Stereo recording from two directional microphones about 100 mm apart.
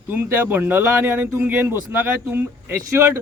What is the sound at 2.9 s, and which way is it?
Speech, 30° right (ahead or behind).